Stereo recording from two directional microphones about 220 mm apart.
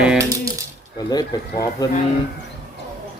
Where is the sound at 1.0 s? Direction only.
20° left (ahead or behind).